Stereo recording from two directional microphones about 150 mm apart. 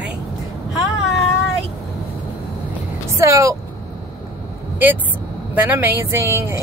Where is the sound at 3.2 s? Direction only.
20° right (ahead or behind).